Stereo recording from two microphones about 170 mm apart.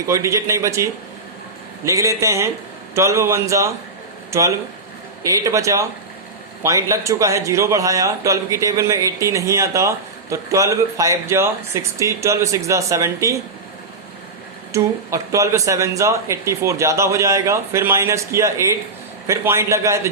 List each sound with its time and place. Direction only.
0.0 s a man's voice: 20° right (ahead or behind)
14.7 s a man's voice: 20° right (ahead or behind)